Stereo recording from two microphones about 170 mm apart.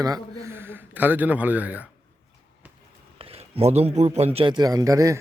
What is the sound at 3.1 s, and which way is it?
Speech, 35° right (ahead or behind).